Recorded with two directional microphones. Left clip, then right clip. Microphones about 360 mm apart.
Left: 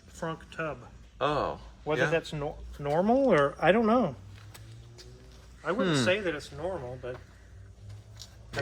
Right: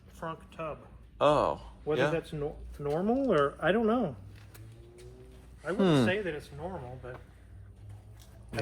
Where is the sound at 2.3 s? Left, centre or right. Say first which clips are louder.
Left 1 dB; centre.